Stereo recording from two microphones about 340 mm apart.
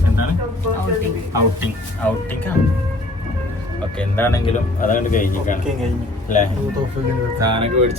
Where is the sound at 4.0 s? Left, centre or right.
Centre.